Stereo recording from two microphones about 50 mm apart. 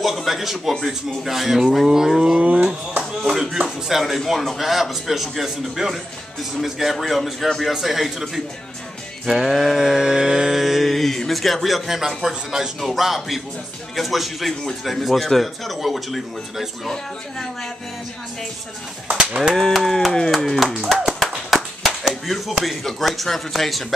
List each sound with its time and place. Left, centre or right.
0.0 s a man's voice: centre
2.4 s cattle: right
3.2 s a sound: centre
3.6 s a man's voice: centre
9.2 s mantra: centre
12.2 s a man's voice: centre
19.0 s cattle: centre
19.5 s a man's voice: centre
20.9 s clapping: centre
22.2 s a man's voice: centre